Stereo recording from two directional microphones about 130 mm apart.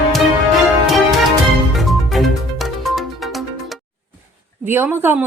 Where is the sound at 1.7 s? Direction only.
Centre (ahead or behind).